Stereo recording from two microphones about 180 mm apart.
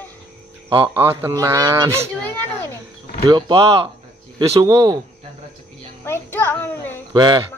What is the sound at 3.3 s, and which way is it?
Speech, 25° right (ahead or behind).